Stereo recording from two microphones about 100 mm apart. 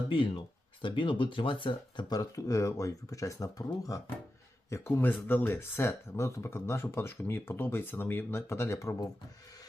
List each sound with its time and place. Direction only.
0.1 s speech: 60° left (ahead or behind); by 3.7 s 35° left (ahead or behind)
4.7 s speech: 25° left (ahead or behind)